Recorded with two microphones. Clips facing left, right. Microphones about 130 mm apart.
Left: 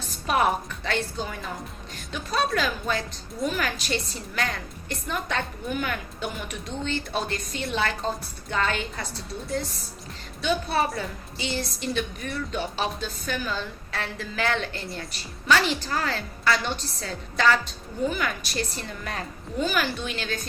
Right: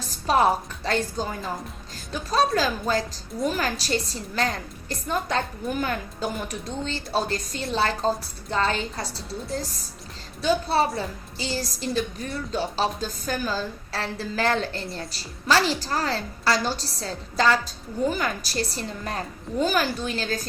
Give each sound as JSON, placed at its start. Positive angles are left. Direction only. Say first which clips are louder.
{"t": 0.0, "sound": "a woman's voice", "louder": "right 3 dB", "side_deg": -30}
{"t": 10.4, "sound": "a woman's voice", "louder": "right 3 dB", "side_deg": -30}